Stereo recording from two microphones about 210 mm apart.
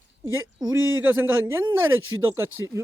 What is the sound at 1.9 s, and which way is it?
Speech, 75° right (ahead or behind).